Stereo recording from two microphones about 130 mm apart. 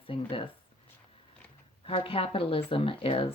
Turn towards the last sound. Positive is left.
turn(degrees=45)  # may be behind; listen again after turning